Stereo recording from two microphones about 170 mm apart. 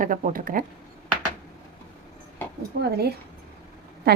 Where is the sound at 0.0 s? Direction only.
55° right (ahead or behind).